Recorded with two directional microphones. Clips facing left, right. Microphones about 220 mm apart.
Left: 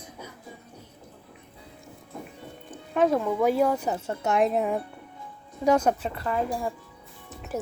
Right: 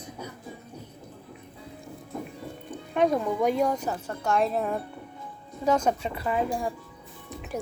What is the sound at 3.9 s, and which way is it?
Speech, 20° left (ahead or behind).